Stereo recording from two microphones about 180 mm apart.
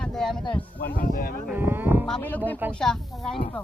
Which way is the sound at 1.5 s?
10° right (ahead or behind).